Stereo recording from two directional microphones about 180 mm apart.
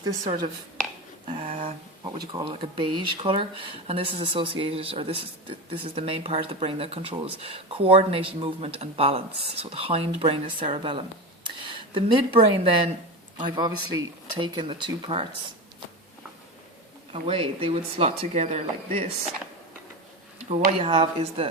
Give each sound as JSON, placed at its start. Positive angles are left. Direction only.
{"t": 0.0, "sound": "speech", "side_deg": -25}
{"t": 1.3, "sound": "speech", "side_deg": -40}
{"t": 2.1, "sound": "speech", "side_deg": -25}
{"t": 13.6, "sound": "speech", "side_deg": -25}
{"t": 17.1, "sound": "speech", "side_deg": -30}
{"t": 20.5, "sound": "speech", "side_deg": -35}